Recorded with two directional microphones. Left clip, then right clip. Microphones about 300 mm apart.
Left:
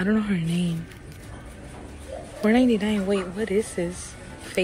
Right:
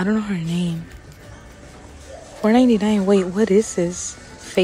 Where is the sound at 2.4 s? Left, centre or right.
Centre.